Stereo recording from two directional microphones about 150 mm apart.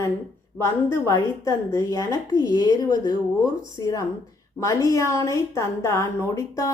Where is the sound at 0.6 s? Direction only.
15° left (ahead or behind).